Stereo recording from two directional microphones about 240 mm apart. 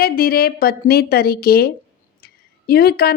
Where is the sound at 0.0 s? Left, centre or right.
Left.